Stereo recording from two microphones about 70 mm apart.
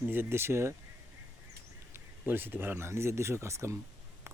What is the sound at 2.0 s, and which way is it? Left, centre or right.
Speech, right.